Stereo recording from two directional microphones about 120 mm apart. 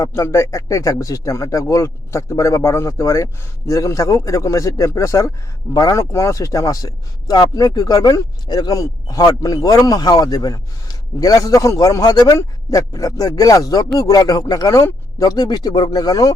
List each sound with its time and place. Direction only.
0.0 s speech: 25° left (ahead or behind)